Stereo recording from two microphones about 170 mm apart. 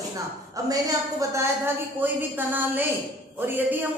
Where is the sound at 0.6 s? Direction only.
20° right (ahead or behind).